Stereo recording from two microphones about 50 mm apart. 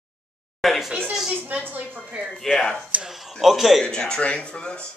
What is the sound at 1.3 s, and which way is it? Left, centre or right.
Speech, right.